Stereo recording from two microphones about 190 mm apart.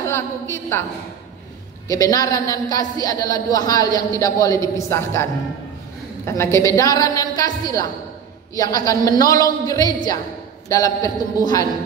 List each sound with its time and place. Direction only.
0.0 s a woman's voice: 15° left (ahead or behind)
1.9 s a woman's voice: 20° left (ahead or behind)
6.2 s a woman's voice: 15° left (ahead or behind)